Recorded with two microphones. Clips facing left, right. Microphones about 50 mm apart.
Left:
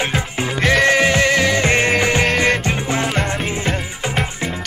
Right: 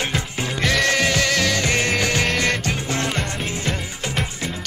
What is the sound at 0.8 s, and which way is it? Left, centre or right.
Music, left.